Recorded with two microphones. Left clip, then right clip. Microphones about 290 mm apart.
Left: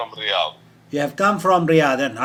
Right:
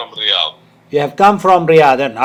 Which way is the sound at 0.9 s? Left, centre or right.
Centre.